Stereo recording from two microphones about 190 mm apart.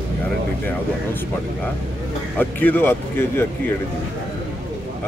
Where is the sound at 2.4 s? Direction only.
10° left (ahead or behind).